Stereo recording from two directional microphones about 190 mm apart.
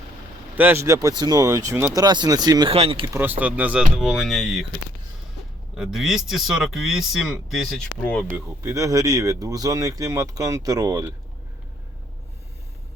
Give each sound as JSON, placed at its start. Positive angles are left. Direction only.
{"t": 0.5, "sound": "speech", "side_deg": -10}
{"t": 3.1, "sound": "speech", "side_deg": -10}
{"t": 5.7, "sound": "speech", "side_deg": -5}
{"t": 8.3, "sound": "speech", "side_deg": -15}